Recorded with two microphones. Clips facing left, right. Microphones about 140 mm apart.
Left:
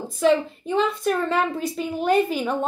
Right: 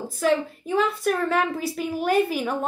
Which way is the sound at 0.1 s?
5° right (ahead or behind).